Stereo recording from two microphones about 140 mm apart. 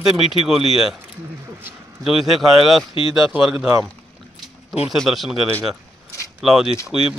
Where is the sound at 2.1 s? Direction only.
Centre (ahead or behind).